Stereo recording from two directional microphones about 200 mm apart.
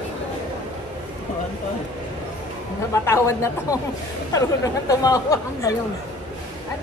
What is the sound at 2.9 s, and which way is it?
Speech, 15° left (ahead or behind).